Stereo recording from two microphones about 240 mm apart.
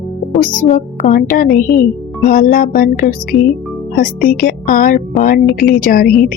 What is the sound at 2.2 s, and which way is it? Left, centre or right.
A woman's voice, left.